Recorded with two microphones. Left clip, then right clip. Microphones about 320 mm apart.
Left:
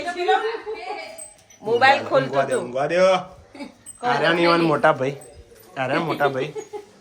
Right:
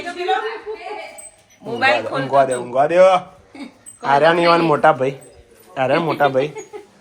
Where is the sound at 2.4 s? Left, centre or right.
Centre.